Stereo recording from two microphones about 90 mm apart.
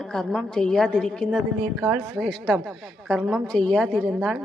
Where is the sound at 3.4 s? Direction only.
10° left (ahead or behind).